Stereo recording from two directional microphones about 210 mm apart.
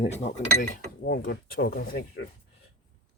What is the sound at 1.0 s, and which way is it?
Speech, 50° left (ahead or behind).